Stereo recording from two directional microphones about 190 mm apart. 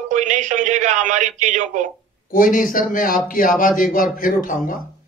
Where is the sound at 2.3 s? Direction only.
45° left (ahead or behind).